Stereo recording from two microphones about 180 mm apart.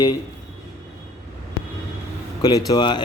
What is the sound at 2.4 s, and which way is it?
Speech, 20° left (ahead or behind).